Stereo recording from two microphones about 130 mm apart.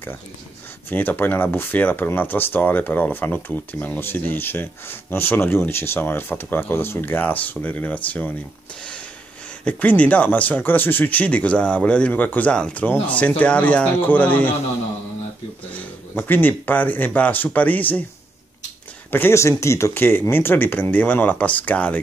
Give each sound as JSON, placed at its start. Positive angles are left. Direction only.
{"t": 0.8, "sound": "speech", "side_deg": 15}
{"t": 9.7, "sound": "speech", "side_deg": 10}
{"t": 15.7, "sound": "speech", "side_deg": 15}
{"t": 19.0, "sound": "speech", "side_deg": 15}